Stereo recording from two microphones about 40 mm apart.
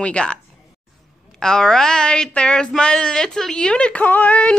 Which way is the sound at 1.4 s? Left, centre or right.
Centre.